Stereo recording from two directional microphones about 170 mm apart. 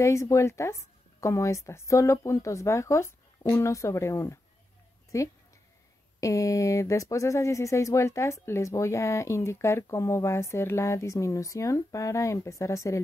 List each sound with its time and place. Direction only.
0.0 s speech: 15° left (ahead or behind)